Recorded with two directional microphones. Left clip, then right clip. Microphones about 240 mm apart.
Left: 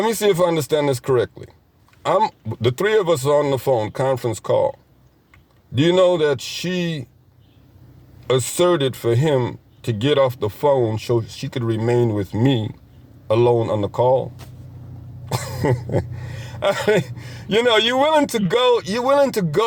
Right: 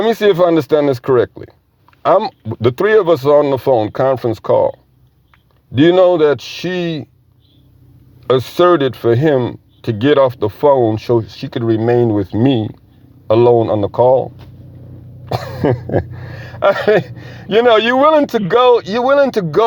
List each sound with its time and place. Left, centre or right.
0.0 s speech: right
5.7 s speech: right
8.3 s speech: right
15.3 s speech: right